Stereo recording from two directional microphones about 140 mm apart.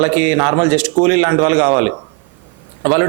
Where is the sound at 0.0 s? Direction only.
15° right (ahead or behind).